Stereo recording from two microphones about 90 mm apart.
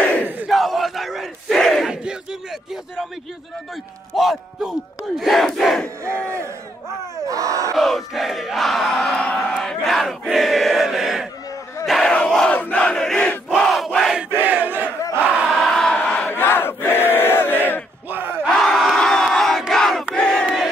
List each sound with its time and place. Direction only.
0.5 s battle cry: centre (ahead or behind)
4.1 s battle cry: centre (ahead or behind)
7.2 s crowd: 40° right (ahead or behind)
7.7 s battle cry: centre (ahead or behind)
9.1 s crowd: 15° left (ahead or behind)
9.6 s battle cry: 5° left (ahead or behind)
12.1 s crowd: 10° left (ahead or behind)
13.6 s battle cry: centre (ahead or behind)
14.3 s battle cry: 20° right (ahead or behind)
15.4 s crowd: 5° left (ahead or behind); by 17.8 s 20° left (ahead or behind)
18.1 s battle cry: 20° right (ahead or behind)
18.5 s crowd: 5° left (ahead or behind)
20.4 s crowd: 5° right (ahead or behind)